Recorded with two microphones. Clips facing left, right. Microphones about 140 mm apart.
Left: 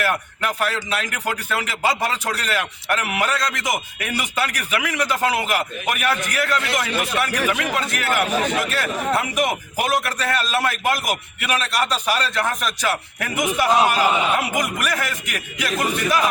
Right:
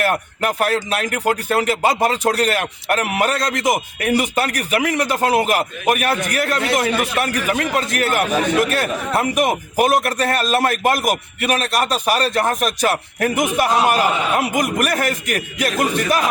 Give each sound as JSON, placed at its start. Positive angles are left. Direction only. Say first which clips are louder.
{"t": 0.0, "sound": "speech", "louder": "right 4 dB", "side_deg": -45}